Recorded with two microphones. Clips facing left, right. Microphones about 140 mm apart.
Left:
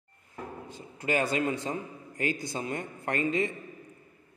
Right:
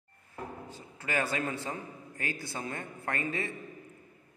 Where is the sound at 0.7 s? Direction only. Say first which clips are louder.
Left 12 dB; 20° left (ahead or behind).